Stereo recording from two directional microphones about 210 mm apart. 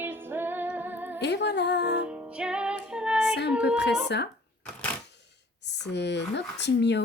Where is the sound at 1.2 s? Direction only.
55° left (ahead or behind).